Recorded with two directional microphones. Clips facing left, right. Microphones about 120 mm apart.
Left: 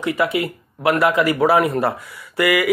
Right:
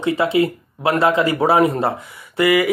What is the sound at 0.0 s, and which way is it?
Speech, 25° right (ahead or behind).